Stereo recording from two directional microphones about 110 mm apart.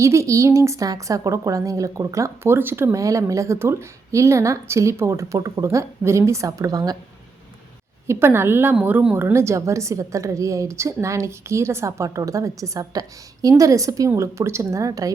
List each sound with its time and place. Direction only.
0.0 s a woman's voice: 25° right (ahead or behind)
8.0 s a woman's voice: 25° right (ahead or behind)